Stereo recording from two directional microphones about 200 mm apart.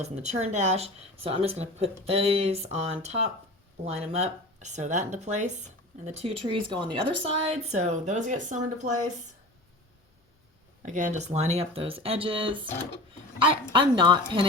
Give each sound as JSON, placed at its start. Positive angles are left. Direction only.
{"t": 0.0, "sound": "speech", "side_deg": -30}
{"t": 10.8, "sound": "speech", "side_deg": -40}
{"t": 13.7, "sound": "speech", "side_deg": -25}